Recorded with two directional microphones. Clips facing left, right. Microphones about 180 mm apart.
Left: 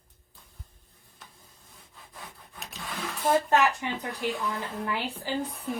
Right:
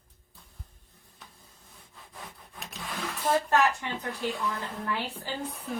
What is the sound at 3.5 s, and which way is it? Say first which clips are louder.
Speech: left 1 dB; 20° left (ahead or behind).